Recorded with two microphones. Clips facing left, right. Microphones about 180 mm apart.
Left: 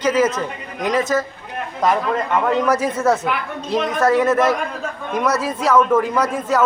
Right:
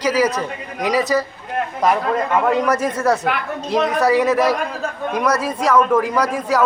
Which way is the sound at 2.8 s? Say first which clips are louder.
Even; 5° left (ahead or behind).